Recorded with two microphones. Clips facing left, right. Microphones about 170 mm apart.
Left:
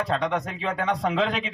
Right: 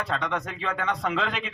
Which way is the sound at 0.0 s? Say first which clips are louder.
Left 4 dB; 35° left (ahead or behind).